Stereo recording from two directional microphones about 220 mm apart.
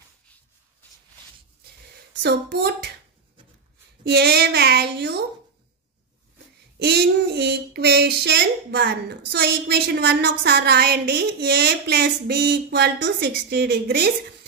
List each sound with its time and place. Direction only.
2.2 s speech: 50° right (ahead or behind)
4.0 s speech: 50° right (ahead or behind)
6.8 s speech: 50° right (ahead or behind)